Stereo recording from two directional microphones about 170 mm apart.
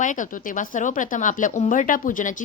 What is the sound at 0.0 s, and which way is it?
A woman's voice, 50° left (ahead or behind).